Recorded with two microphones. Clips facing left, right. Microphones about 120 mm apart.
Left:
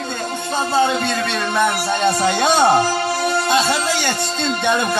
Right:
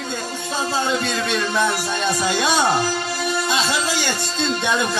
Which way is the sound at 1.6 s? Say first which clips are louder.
Left 4 dB; 55° left (ahead or behind).